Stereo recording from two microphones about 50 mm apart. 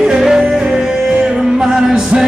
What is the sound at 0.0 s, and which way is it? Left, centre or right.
Music, centre.